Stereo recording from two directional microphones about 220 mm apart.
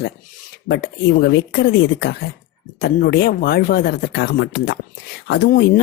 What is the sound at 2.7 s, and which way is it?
Speech, 45° left (ahead or behind).